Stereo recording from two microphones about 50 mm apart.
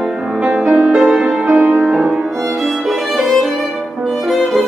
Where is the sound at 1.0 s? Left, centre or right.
Centre.